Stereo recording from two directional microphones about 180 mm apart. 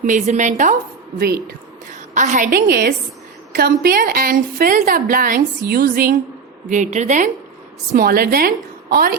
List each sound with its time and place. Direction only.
0.0 s a woman's voice: 45° right (ahead or behind)
2.1 s a woman's voice: 45° right (ahead or behind)
7.9 s a woman's voice: 55° right (ahead or behind)